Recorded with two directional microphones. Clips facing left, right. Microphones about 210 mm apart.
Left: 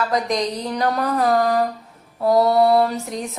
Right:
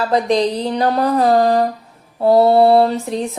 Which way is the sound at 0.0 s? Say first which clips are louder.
Right 6 dB; 30° right (ahead or behind).